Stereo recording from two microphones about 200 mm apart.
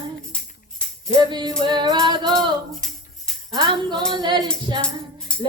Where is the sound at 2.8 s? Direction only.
Centre (ahead or behind).